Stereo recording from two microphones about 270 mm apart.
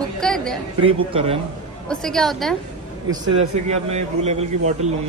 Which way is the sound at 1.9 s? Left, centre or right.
Centre.